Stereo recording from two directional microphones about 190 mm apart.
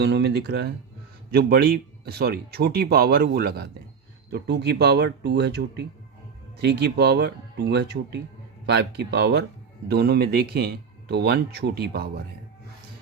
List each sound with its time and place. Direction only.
0.0 s speech: 60° right (ahead or behind)